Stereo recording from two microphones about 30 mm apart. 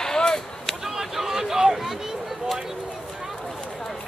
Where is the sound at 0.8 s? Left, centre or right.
Centre.